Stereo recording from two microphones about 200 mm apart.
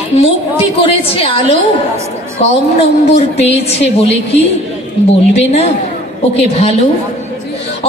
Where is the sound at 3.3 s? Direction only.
30° left (ahead or behind).